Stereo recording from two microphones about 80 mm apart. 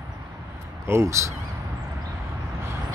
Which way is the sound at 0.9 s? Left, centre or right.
Right.